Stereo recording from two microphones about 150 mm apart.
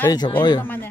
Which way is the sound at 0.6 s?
15° left (ahead or behind).